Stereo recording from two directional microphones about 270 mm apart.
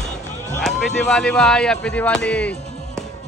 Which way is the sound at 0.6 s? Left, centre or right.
Centre.